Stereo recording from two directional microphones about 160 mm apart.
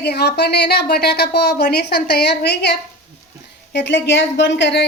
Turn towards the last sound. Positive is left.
turn(degrees=90)